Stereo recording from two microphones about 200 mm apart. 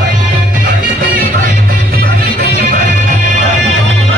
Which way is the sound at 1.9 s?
50° right (ahead or behind).